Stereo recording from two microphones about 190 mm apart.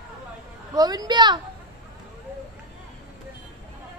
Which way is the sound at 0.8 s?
20° right (ahead or behind).